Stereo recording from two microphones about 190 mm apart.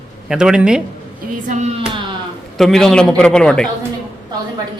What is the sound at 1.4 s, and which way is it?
Speech, 40° right (ahead or behind).